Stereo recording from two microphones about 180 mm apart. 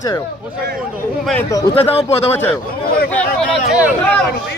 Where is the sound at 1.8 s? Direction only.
35° left (ahead or behind).